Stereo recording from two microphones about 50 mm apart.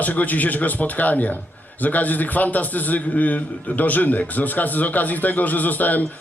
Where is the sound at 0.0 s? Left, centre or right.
Left.